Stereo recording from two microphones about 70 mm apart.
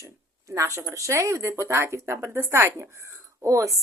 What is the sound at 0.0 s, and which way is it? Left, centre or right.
A woman's voice, right.